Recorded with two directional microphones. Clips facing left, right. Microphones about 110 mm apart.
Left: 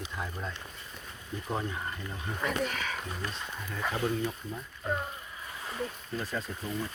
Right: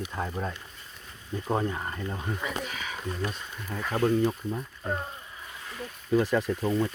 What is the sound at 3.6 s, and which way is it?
Speech, 35° right (ahead or behind).